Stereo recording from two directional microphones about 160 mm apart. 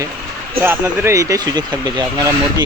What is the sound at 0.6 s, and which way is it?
Speech, 15° right (ahead or behind).